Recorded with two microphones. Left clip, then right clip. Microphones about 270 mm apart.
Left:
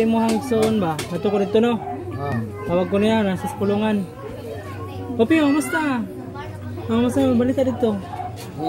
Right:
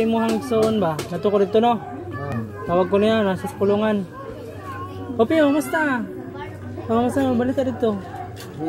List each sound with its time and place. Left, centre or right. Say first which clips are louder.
0.0 s speech: left 1 dB; centre
5.1 s speech: even; centre